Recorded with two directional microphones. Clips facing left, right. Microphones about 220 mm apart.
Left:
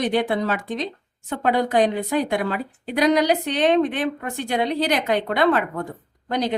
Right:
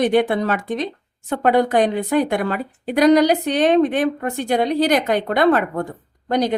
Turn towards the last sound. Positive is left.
turn(degrees=-45)  # may be behind; listen again after turning